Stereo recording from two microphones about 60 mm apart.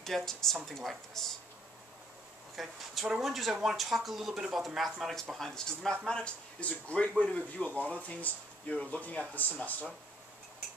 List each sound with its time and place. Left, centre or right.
0.0 s speech: centre
2.5 s speech: centre; by 9.8 s left